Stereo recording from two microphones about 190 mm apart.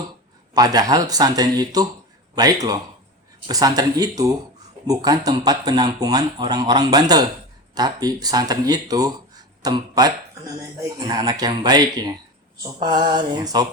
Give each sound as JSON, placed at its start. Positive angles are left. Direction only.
{"t": 0.5, "sound": "speech", "side_deg": -20}